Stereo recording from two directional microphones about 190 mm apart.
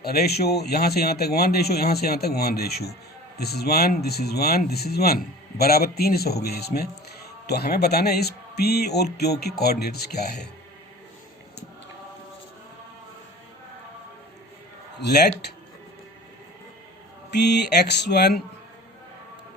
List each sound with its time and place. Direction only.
0.0 s speech: 55° left (ahead or behind)
15.0 s speech: 60° left (ahead or behind)
17.3 s speech: 60° left (ahead or behind)